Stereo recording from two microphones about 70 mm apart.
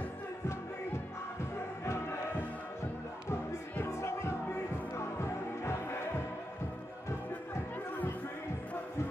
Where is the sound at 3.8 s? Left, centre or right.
Left.